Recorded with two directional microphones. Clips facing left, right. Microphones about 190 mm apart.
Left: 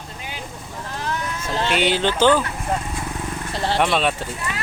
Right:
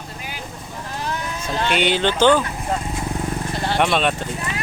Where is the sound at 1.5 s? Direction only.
30° left (ahead or behind).